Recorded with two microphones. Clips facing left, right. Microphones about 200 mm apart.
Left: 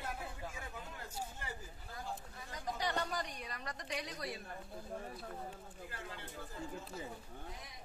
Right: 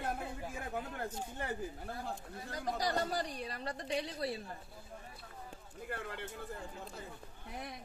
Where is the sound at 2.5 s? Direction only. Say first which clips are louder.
Right 4 dB; 35° right (ahead or behind).